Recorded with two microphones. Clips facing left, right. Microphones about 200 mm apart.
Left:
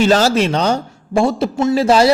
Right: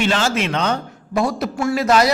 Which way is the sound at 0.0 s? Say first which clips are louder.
Left 6 dB; 40° left (ahead or behind).